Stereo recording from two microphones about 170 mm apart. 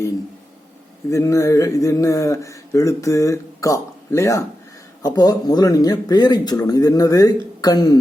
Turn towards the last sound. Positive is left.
turn(degrees=25)  # may be behind; listen again after turning